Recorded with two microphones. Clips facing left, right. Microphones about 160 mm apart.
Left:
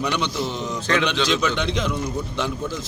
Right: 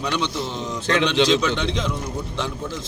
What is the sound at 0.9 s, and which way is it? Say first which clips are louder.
Speech: right 3 dB; 20° right (ahead or behind).